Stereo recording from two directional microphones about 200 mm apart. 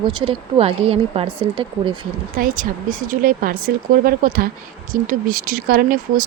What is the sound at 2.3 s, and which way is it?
Speech, 45° right (ahead or behind).